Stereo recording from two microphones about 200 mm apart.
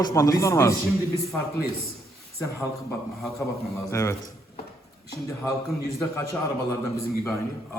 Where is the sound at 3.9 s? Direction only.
15° left (ahead or behind).